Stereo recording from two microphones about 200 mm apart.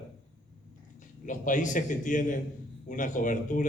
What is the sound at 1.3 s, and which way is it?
A man's voice, 40° left (ahead or behind).